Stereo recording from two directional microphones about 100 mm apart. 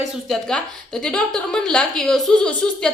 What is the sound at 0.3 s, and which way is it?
A woman's voice, 5° left (ahead or behind).